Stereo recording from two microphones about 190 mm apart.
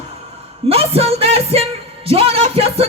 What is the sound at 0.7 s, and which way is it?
Music, 30° right (ahead or behind).